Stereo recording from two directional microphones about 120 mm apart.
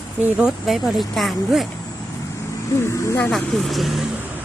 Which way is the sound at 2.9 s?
25° left (ahead or behind).